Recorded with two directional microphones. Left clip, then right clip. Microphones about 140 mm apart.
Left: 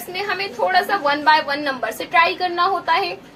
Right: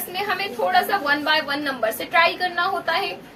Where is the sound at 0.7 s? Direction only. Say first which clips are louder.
Left 1 dB; 20° right (ahead or behind).